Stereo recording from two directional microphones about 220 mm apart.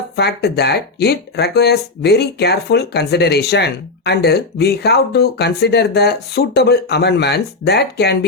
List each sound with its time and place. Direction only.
0.2 s speech: 45° left (ahead or behind)